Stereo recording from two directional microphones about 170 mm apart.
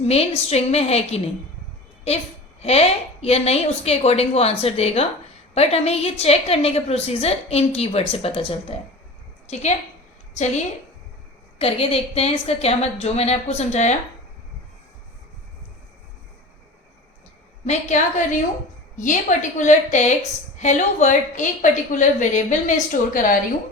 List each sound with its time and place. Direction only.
0.0 s a woman's voice: 40° left (ahead or behind)
2.6 s a woman's voice: 35° left (ahead or behind)
10.3 s a woman's voice: 45° left (ahead or behind)
11.6 s a woman's voice: 35° left (ahead or behind)
17.7 s a woman's voice: 45° left (ahead or behind)